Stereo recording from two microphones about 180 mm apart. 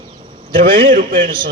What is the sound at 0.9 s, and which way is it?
Speech, 50° right (ahead or behind).